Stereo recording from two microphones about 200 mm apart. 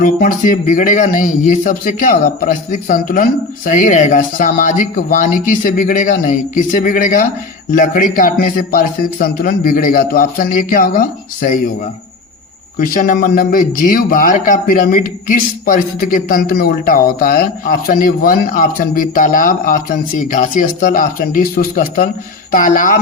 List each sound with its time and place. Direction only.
0.0 s a man's voice: 45° left (ahead or behind)
12.8 s a man's voice: 45° left (ahead or behind)